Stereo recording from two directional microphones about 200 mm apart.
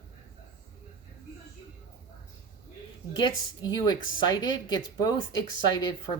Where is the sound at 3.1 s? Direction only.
20° left (ahead or behind).